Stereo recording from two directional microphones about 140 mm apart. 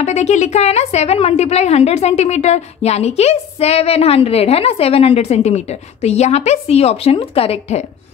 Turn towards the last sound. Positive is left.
turn(degrees=45)  # may be behind; listen again after turning